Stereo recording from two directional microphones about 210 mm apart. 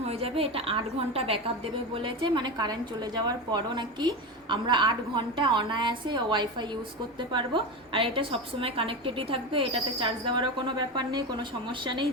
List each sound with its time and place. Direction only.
0.0 s a woman's voice: 30° right (ahead or behind)